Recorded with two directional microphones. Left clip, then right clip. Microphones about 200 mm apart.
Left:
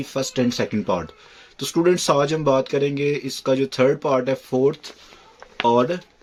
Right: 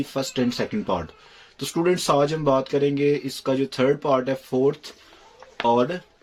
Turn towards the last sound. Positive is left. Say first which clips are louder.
# left 2 dB
turn(degrees=25)  # may be behind; listen again after turning